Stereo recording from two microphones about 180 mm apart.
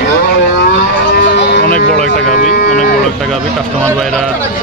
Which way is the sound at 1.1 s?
70° left (ahead or behind).